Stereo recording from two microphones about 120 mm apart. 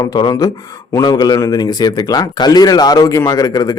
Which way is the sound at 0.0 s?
35° left (ahead or behind).